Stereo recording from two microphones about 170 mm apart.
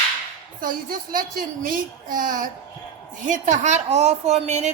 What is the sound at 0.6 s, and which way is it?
A woman's voice, 55° right (ahead or behind).